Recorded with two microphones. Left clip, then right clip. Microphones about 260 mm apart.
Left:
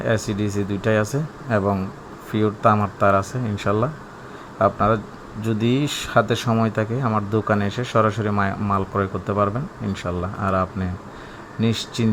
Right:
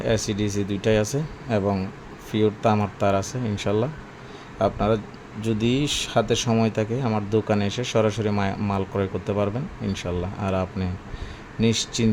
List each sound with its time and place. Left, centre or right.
0.0 s speech: centre